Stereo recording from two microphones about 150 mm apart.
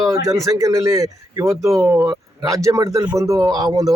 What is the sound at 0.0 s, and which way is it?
A man's voice, 20° right (ahead or behind).